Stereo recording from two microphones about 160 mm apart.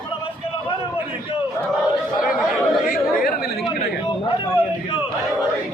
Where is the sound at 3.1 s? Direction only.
65° left (ahead or behind).